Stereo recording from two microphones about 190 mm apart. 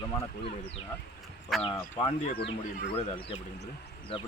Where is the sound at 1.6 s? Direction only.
25° left (ahead or behind).